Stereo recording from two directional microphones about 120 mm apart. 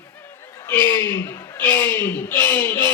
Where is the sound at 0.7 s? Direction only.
15° left (ahead or behind).